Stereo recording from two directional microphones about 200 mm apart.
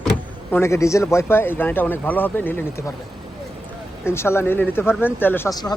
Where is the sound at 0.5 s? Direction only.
15° left (ahead or behind).